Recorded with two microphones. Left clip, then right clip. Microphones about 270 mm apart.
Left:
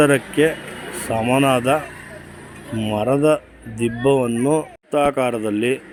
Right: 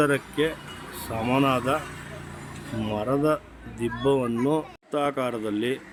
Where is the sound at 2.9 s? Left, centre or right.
Centre.